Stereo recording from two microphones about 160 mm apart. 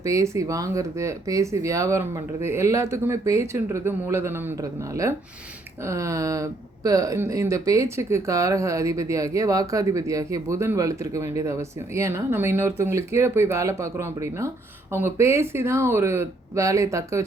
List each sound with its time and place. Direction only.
0.0 s speech: 20° right (ahead or behind)
5.8 s speech: 20° right (ahead or behind)